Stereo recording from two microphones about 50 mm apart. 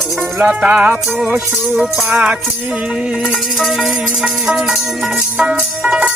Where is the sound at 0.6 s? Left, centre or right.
Right.